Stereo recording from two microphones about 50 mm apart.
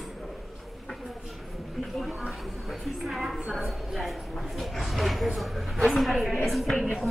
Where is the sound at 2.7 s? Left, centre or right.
Centre.